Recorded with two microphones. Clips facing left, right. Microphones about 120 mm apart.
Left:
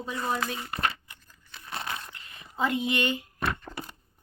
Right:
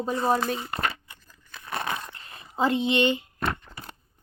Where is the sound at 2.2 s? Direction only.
35° right (ahead or behind).